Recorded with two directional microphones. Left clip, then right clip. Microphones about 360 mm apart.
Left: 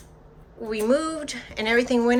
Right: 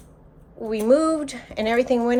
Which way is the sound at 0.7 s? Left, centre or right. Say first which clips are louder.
Right 5 dB; centre.